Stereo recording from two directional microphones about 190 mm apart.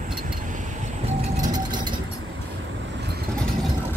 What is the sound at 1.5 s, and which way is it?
Vehicle, 25° right (ahead or behind).